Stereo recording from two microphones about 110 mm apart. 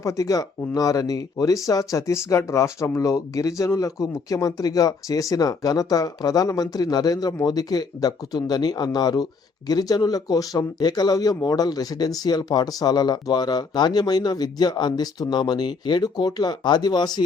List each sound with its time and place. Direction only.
0.0 s speech: 30° left (ahead or behind)